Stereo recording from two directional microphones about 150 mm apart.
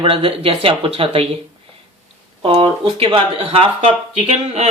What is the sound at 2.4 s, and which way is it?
Speech, 35° right (ahead or behind).